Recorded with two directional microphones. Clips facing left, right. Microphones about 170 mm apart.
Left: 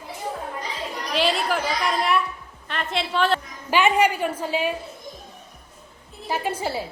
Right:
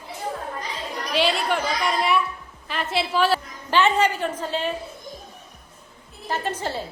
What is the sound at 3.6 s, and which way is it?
A woman's voice, 10° left (ahead or behind).